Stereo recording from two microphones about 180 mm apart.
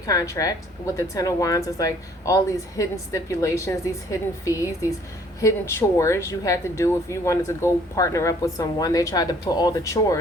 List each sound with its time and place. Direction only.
0.0 s speech: 20° left (ahead or behind)